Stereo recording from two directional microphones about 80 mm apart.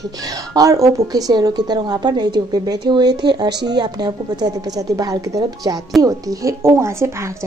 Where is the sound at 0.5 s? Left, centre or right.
Right.